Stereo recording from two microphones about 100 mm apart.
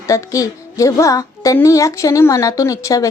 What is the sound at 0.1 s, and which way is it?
A woman's voice, 35° left (ahead or behind).